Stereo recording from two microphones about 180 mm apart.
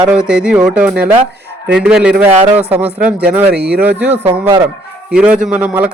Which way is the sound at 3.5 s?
65° right (ahead or behind).